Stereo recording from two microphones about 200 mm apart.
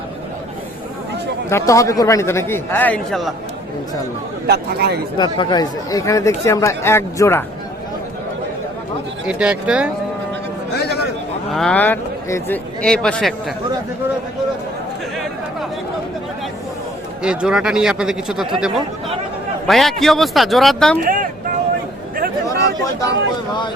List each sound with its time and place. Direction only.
1.5 s speech: 15° left (ahead or behind)
4.4 s speech: 55° right (ahead or behind)
5.1 s speech: 20° left (ahead or behind)
9.2 s a man's voice: 5° right (ahead or behind)
10.8 s a sound: 55° left (ahead or behind)
11.5 s a man's voice: 5° left (ahead or behind)
17.2 s a man's voice: 5° right (ahead or behind)
19.6 s a man's voice: centre (ahead or behind)
21.0 s speech: 45° right (ahead or behind)
22.4 s a sound: 15° left (ahead or behind)